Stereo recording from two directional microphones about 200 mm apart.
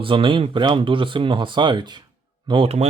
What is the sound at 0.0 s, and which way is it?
Speech, 25° right (ahead or behind).